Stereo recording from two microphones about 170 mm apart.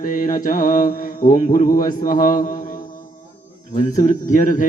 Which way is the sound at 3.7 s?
50° left (ahead or behind).